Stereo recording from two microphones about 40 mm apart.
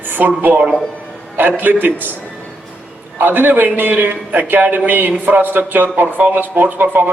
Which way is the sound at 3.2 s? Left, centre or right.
Right.